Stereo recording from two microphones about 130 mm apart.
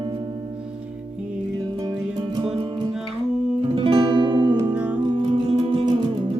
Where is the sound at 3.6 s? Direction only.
40° right (ahead or behind).